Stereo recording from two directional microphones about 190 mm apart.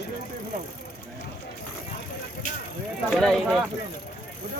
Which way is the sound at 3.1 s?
Centre (ahead or behind).